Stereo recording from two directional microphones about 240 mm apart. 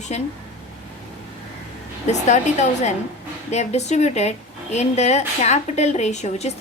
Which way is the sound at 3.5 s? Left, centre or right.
Left.